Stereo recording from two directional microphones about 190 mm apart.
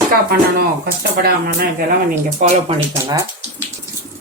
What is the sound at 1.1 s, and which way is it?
Speech, 50° right (ahead or behind).